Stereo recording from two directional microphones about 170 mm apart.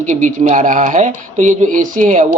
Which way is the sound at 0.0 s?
45° right (ahead or behind).